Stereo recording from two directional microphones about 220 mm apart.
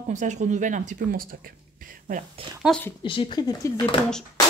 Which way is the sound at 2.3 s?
20° right (ahead or behind).